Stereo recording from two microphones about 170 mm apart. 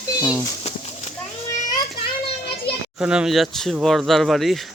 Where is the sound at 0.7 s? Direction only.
40° left (ahead or behind).